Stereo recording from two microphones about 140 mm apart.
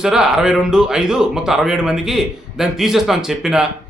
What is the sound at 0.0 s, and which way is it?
A man's voice, 5° right (ahead or behind).